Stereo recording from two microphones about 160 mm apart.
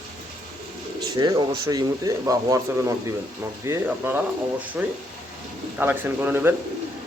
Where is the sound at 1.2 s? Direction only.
25° right (ahead or behind).